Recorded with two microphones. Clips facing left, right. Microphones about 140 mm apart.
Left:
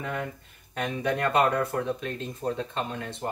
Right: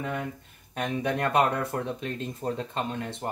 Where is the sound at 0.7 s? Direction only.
20° right (ahead or behind).